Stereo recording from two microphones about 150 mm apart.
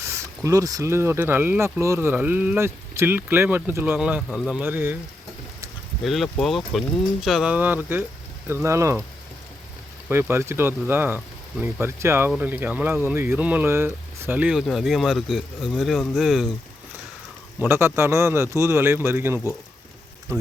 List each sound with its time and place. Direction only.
0.1 s speech: 20° right (ahead or behind)
6.0 s speech: centre (ahead or behind); by 9.0 s 20° right (ahead or behind)
10.1 s speech: 15° right (ahead or behind)
17.6 s speech: 15° right (ahead or behind)